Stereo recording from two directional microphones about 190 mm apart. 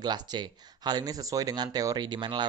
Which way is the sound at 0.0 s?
20° right (ahead or behind).